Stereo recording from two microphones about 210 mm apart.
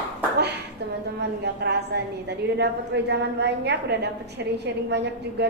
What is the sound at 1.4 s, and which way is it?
A woman's voice, 50° right (ahead or behind).